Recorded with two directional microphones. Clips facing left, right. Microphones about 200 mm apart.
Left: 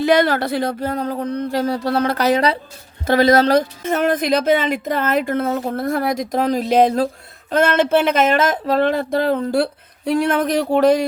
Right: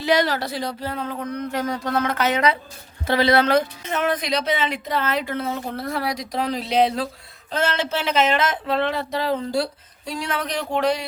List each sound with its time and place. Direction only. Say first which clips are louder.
0.0 s speech: left 5 dB; 55° left (ahead or behind); by 2.6 s 35° left (ahead or behind)
3.1 s speech: left 5 dB; 45° left (ahead or behind)